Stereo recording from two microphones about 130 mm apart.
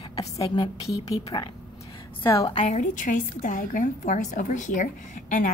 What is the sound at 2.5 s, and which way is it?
A woman's voice, 65° left (ahead or behind).